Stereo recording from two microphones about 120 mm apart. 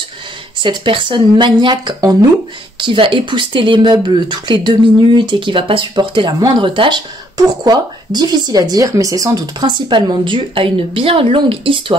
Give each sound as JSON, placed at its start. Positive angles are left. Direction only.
{"t": 0.6, "sound": "speech", "side_deg": -45}
{"t": 2.8, "sound": "speech", "side_deg": -45}